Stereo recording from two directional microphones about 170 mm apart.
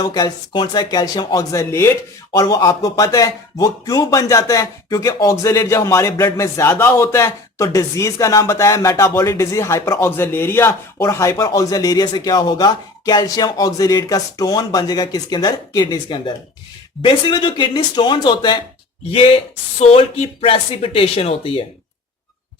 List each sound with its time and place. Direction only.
0.0 s speech: 25° left (ahead or behind)
19.8 s speech: 35° left (ahead or behind)